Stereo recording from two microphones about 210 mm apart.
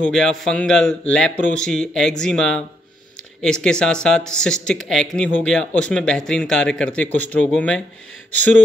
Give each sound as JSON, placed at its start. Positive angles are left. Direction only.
{"t": 0.0, "sound": "speech", "side_deg": 5}